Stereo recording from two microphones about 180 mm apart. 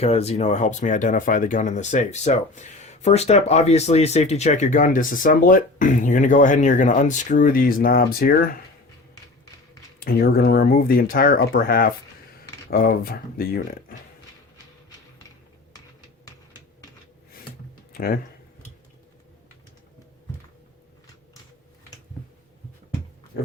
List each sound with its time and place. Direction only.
0.0 s speech: 35° left (ahead or behind); by 8.4 s 55° left (ahead or behind)
10.0 s speech: 55° left (ahead or behind)
17.9 s speech: 55° left (ahead or behind)